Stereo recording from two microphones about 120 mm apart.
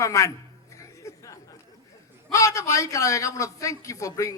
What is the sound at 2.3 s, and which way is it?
A man's voice, 30° left (ahead or behind).